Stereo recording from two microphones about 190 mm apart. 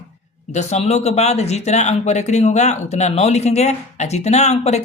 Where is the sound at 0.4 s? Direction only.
35° left (ahead or behind).